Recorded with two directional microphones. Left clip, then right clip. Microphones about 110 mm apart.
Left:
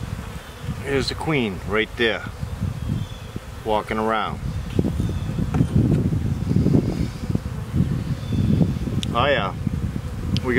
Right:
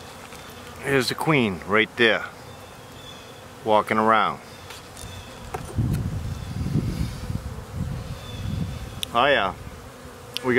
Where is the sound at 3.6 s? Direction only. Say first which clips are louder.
Right 3 dB; 20° right (ahead or behind).